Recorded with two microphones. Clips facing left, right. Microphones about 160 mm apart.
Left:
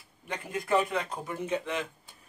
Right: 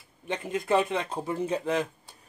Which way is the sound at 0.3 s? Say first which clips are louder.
Right 3 dB; 20° right (ahead or behind).